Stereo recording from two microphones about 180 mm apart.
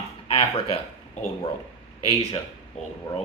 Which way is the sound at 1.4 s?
20° left (ahead or behind).